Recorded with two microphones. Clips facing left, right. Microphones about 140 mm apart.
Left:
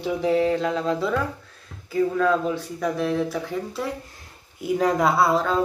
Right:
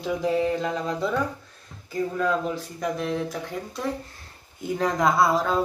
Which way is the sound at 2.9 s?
5° left (ahead or behind).